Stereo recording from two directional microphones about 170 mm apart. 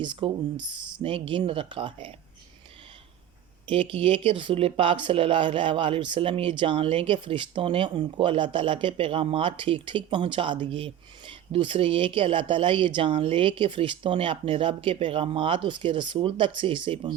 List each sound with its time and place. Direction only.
0.0 s speech: 30° right (ahead or behind)
3.7 s speech: 30° right (ahead or behind)